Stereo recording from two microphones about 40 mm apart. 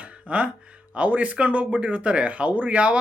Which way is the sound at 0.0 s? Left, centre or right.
Right.